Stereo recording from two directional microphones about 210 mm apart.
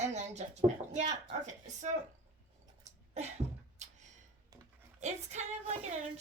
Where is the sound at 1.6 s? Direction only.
35° right (ahead or behind).